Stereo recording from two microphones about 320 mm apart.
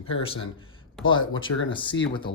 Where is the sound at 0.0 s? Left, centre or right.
Centre.